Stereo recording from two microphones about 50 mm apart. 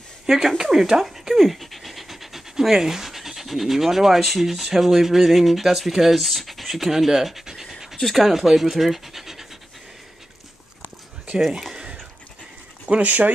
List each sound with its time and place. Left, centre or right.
0.3 s speech: centre
11.4 s speech: centre
11.7 s a sound: centre
12.8 s speech: right